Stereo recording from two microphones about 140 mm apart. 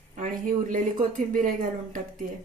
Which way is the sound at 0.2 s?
65° right (ahead or behind).